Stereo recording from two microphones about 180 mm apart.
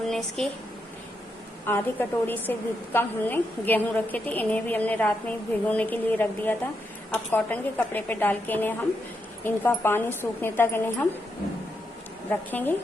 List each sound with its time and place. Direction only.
0.1 s speech: centre (ahead or behind)
1.6 s a woman's voice: 10° left (ahead or behind)
12.3 s a woman's voice: 10° left (ahead or behind)